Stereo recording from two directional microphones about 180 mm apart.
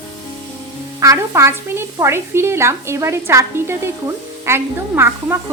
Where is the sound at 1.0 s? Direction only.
15° right (ahead or behind).